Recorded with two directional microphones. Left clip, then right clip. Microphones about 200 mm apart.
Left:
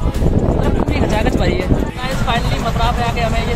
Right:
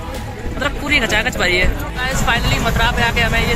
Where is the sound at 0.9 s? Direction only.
5° left (ahead or behind).